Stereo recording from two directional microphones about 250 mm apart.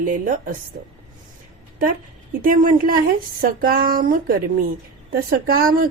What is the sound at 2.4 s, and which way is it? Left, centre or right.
A woman's voice, right.